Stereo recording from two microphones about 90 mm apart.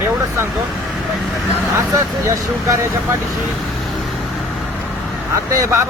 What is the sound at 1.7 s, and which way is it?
Speech, 35° right (ahead or behind).